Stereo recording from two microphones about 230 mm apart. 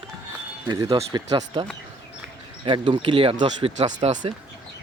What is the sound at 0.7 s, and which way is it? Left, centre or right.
Speech, centre.